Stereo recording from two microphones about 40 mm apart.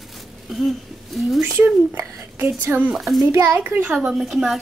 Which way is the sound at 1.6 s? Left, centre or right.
Right.